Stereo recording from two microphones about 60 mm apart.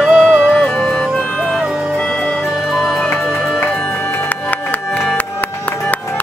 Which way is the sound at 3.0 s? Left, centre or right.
Centre.